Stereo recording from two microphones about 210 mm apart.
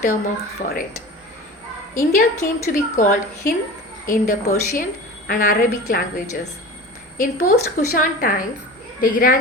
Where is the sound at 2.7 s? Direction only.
40° left (ahead or behind).